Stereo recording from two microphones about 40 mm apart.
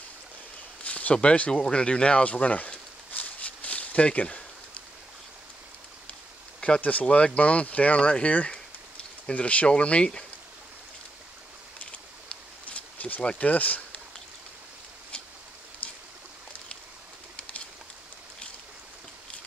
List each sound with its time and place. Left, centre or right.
0.8 s speech: left
2.3 s speech: left
3.1 s a sound: left
6.8 s speech: left
12.9 s a sound: left
13.4 s speech: left
15.8 s stream: left